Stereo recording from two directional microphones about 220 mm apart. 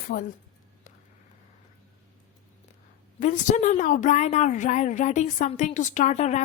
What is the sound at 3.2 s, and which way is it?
A woman's voice, 35° left (ahead or behind).